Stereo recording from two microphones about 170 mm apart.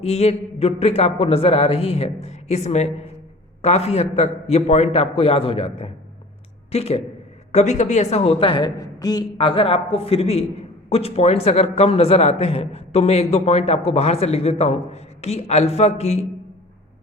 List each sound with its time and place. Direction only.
0.0 s speech: 40° left (ahead or behind)